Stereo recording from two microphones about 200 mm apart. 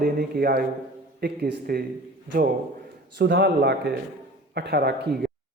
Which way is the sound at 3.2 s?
55° right (ahead or behind).